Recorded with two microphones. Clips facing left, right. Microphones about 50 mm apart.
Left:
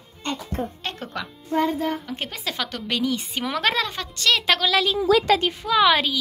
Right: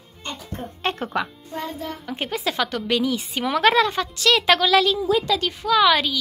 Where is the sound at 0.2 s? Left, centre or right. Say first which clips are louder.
Left 5 dB; left.